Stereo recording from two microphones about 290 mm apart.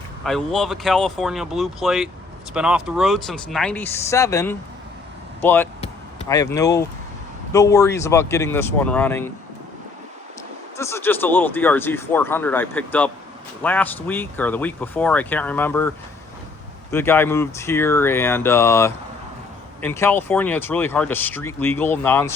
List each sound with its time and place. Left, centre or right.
0.3 s speech: centre
5.8 s a sound: centre
7.5 s speech: centre
10.8 s speech: centre
16.9 s speech: centre